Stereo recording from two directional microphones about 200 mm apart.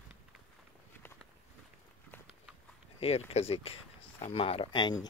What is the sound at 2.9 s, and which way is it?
Speech, 30° left (ahead or behind).